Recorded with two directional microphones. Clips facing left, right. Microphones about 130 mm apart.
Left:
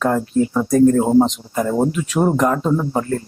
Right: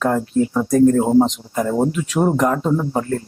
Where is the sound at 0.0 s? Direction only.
15° left (ahead or behind).